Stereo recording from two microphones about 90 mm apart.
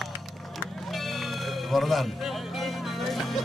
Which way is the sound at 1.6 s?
Centre (ahead or behind).